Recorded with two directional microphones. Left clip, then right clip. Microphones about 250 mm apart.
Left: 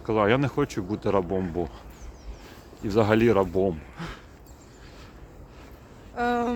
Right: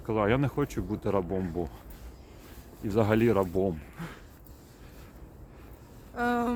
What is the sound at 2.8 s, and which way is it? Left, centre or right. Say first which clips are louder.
Speech: left 4 dB; centre.